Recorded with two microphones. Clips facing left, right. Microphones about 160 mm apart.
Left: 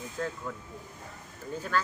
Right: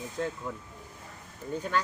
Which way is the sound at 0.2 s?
20° right (ahead or behind).